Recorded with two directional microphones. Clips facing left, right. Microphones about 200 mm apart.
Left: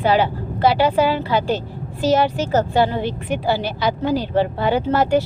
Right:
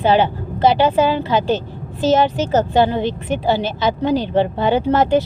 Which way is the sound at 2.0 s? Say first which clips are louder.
Right 2 dB; 20° right (ahead or behind).